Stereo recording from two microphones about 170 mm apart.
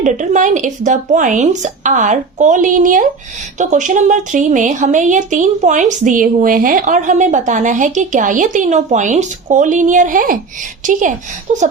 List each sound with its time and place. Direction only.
0.0 s a woman's voice: 50° right (ahead or behind)